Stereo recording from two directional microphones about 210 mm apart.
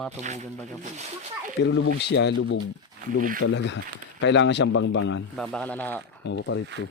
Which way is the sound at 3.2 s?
40° right (ahead or behind).